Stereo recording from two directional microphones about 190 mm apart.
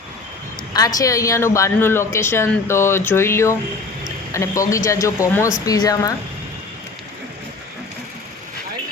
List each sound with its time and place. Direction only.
0.7 s speech: 20° left (ahead or behind)